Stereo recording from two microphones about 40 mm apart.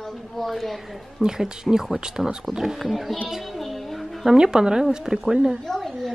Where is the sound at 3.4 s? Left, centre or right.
Centre.